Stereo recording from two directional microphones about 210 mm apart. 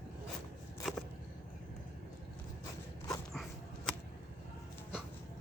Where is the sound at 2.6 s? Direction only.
20° left (ahead or behind).